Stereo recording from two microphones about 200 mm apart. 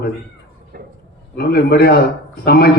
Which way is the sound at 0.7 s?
50° right (ahead or behind).